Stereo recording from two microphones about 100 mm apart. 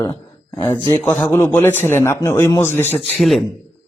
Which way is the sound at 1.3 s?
25° left (ahead or behind).